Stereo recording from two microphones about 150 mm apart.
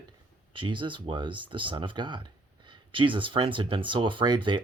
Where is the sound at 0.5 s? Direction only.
35° right (ahead or behind).